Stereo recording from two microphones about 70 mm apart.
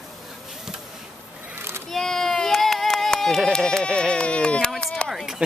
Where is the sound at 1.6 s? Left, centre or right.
Right.